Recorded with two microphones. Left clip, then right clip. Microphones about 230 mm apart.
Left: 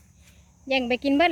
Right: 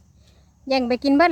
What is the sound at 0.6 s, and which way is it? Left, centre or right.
Speech, right.